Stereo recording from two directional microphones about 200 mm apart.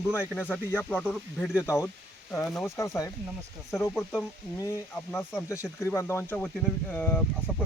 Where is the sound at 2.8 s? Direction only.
15° left (ahead or behind).